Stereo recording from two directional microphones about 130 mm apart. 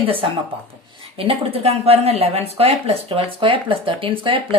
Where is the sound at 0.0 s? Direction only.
45° right (ahead or behind).